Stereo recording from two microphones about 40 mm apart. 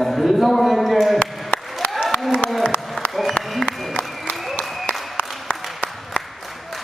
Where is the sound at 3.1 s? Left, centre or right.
Centre.